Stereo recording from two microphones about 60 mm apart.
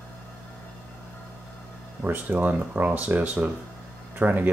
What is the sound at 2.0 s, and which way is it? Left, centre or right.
Speech, right.